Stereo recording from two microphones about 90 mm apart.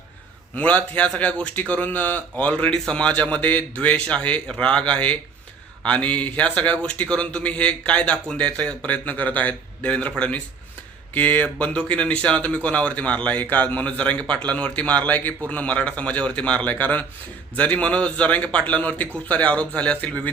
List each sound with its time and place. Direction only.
0.5 s a man's voice: 15° left (ahead or behind)